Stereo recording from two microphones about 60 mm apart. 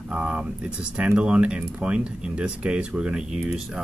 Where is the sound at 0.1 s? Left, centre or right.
Centre.